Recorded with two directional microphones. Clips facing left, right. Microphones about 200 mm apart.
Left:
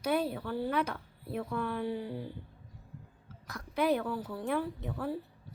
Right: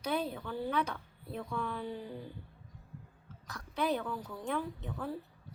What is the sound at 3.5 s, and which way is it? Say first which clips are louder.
A child's voice: left 4 dB; 10° left (ahead or behind).